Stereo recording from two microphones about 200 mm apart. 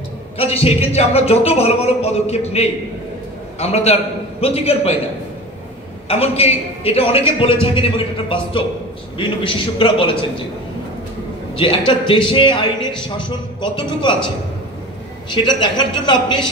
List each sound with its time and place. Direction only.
0.4 s speech: 30° left (ahead or behind)
6.0 s a man's voice: 30° left (ahead or behind)
11.5 s a man's voice: 25° left (ahead or behind)
15.3 s a man's voice: 25° left (ahead or behind)